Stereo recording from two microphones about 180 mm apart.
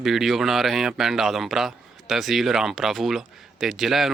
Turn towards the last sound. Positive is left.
turn(degrees=0)  # may be behind; listen again after turning